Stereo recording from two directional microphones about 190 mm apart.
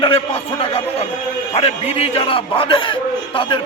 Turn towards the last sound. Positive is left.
turn(degrees=25)  # may be behind; listen again after turning